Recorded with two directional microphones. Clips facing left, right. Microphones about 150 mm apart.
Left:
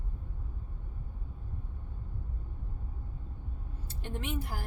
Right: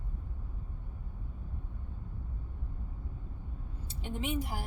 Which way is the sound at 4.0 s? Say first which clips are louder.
Right 2 dB; 15° right (ahead or behind).